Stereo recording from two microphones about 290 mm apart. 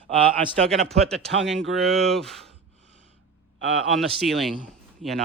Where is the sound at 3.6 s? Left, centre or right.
Right.